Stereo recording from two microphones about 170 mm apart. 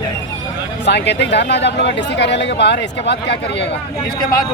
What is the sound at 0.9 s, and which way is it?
Speech, 90° left.